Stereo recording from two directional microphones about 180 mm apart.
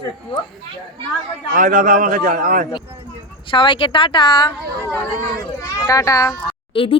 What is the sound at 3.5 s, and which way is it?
A woman's voice, 25° left (ahead or behind).